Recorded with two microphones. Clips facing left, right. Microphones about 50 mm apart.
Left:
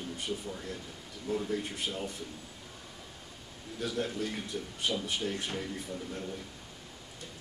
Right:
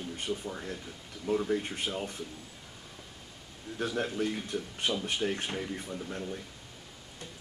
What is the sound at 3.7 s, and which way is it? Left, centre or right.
Speech, right.